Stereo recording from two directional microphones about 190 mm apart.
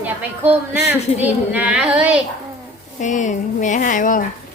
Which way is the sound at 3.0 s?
40° left (ahead or behind).